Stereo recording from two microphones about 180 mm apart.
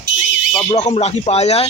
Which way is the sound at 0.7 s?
35° left (ahead or behind).